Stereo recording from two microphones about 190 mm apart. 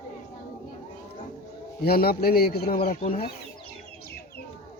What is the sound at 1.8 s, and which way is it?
A man's voice, 55° left (ahead or behind).